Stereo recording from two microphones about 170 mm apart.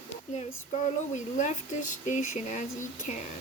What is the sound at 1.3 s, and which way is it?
Speech, 45° left (ahead or behind).